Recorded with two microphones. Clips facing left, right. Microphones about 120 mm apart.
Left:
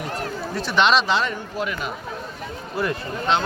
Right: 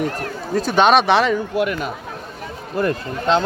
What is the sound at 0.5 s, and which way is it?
A man's voice, 45° right (ahead or behind).